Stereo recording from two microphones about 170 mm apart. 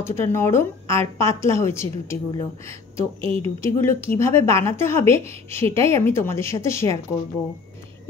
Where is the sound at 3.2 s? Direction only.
30° right (ahead or behind).